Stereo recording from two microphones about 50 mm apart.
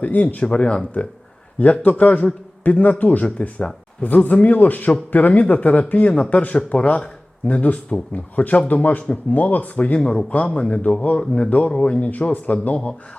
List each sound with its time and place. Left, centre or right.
0.0 s speech: left
0.4 s speech: centre
10.0 s speech: centre
10.3 s speech: left